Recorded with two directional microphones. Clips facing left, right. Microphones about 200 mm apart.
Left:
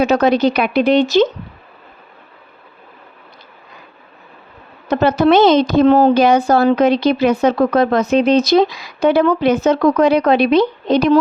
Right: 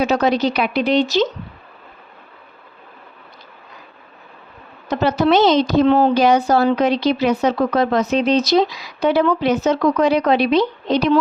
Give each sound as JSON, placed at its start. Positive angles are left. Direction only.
{"t": 0.0, "sound": "speech", "side_deg": 55}
{"t": 4.9, "sound": "a woman's voice", "side_deg": 55}